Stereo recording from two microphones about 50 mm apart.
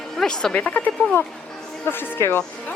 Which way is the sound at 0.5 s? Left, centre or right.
Left.